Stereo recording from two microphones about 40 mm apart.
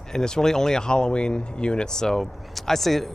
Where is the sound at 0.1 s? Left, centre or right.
Centre.